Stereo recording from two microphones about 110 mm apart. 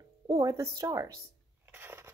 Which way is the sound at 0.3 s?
35° right (ahead or behind).